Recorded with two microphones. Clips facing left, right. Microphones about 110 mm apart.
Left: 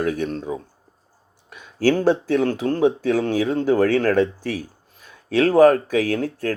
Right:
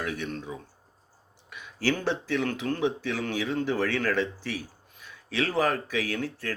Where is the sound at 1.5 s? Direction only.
45° left (ahead or behind).